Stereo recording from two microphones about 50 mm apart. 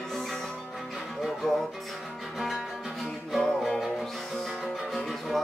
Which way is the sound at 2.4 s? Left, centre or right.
Centre.